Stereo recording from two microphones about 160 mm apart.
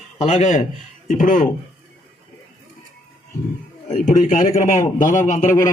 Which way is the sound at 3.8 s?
50° left (ahead or behind).